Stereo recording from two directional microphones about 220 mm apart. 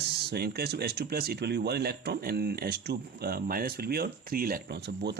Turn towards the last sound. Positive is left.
turn(degrees=-50)  # may be behind; listen again after turning